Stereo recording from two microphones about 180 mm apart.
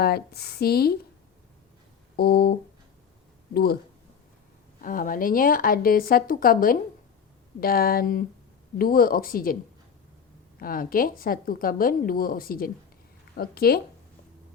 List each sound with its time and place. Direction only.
0.0 s speech: 60° left (ahead or behind)
2.1 s speech: 60° left (ahead or behind)
4.8 s a woman's voice: 50° left (ahead or behind)
10.6 s a woman's voice: 50° left (ahead or behind)